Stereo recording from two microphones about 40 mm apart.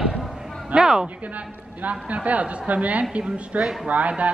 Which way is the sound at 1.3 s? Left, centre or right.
Right.